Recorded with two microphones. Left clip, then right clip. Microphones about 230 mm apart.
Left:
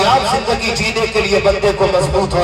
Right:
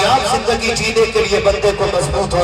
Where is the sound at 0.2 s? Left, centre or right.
Left.